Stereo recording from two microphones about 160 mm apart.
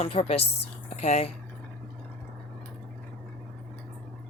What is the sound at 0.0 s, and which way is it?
Speech, 40° left (ahead or behind).